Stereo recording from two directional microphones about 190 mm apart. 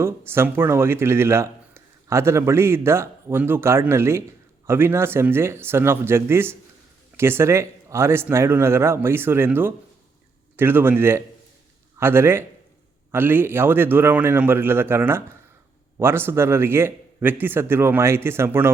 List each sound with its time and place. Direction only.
0.0 s speech: 10° right (ahead or behind)